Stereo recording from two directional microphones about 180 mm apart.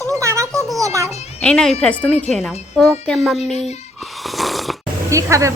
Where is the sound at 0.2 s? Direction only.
15° right (ahead or behind).